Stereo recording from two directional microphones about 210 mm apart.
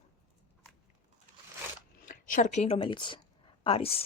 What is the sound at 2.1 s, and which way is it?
Speech, 35° left (ahead or behind).